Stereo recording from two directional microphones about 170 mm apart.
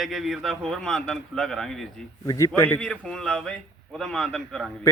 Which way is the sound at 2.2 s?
20° left (ahead or behind).